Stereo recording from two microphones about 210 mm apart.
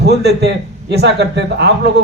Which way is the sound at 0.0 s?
50° right (ahead or behind).